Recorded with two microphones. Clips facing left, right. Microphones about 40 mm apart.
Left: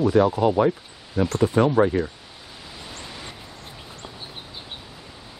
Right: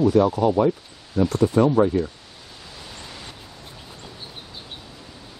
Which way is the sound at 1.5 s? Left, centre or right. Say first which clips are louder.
Right 1 dB; left.